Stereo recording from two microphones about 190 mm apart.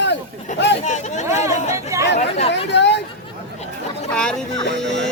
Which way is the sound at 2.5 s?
65° left (ahead or behind).